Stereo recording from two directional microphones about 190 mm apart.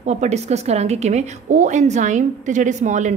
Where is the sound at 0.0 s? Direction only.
35° right (ahead or behind).